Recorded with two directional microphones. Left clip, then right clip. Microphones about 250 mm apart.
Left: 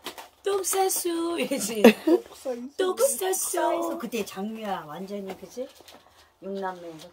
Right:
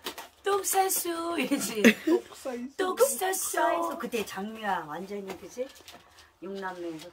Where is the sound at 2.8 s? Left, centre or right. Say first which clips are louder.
Left 1 dB; centre.